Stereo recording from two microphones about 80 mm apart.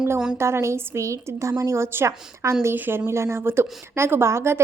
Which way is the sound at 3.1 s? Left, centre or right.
Right.